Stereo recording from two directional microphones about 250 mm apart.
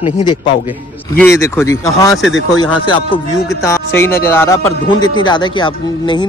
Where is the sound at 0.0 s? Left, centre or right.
Centre.